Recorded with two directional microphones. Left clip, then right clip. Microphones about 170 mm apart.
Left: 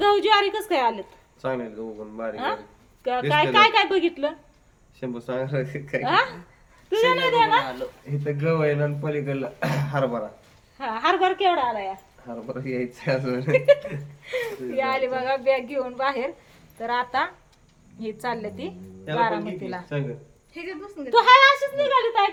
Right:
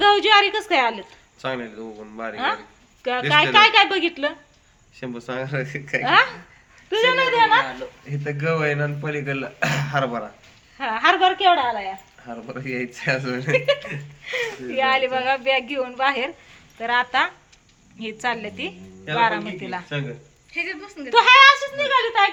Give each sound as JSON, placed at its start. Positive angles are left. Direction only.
{"t": 0.0, "sound": "a sound", "side_deg": -25}
{"t": 1.4, "sound": "speech", "side_deg": 10}
{"t": 2.3, "sound": "a woman's voice", "side_deg": -30}
{"t": 4.9, "sound": "speech", "side_deg": 5}
{"t": 6.0, "sound": "speech", "side_deg": -35}
{"t": 8.1, "sound": "speech", "side_deg": 0}
{"t": 10.8, "sound": "speech", "side_deg": -35}
{"t": 12.2, "sound": "speech", "side_deg": 0}
{"t": 14.3, "sound": "speech", "side_deg": -35}
{"t": 16.7, "sound": "a woman's voice", "side_deg": -20}
{"t": 19.1, "sound": "speech", "side_deg": 0}
{"t": 19.6, "sound": "a woman's voice", "side_deg": -15}
{"t": 20.5, "sound": "a woman's voice", "side_deg": 25}
{"t": 21.1, "sound": "a woman's voice", "side_deg": -15}